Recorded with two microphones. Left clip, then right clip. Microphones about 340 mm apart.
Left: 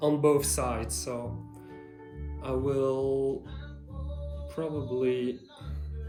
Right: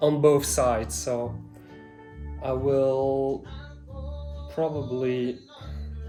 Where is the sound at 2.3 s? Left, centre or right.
Right.